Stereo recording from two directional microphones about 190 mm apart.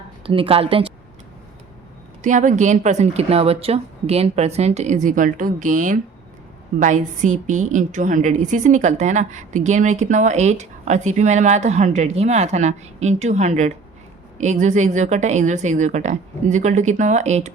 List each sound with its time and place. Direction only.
0.2 s a woman's voice: 30° right (ahead or behind)
2.2 s a woman's voice: 40° right (ahead or behind)